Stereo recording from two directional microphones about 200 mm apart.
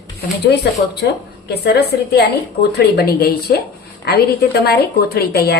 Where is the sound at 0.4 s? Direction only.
60° left (ahead or behind).